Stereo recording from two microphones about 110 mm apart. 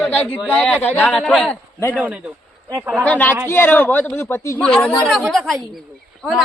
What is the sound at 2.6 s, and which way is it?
Speech, 25° right (ahead or behind).